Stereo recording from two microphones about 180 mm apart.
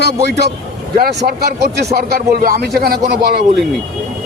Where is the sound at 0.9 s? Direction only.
60° right (ahead or behind).